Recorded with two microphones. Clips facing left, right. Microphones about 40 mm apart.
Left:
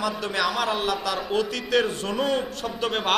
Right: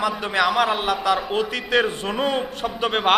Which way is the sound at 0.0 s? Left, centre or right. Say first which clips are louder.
Right 4 dB; right.